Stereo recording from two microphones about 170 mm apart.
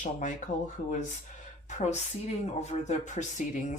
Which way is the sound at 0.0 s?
45° left (ahead or behind).